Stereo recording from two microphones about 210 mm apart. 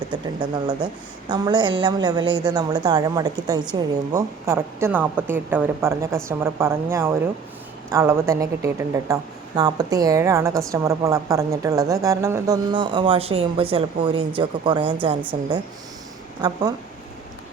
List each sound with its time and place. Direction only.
0.1 s a woman's voice: 20° right (ahead or behind)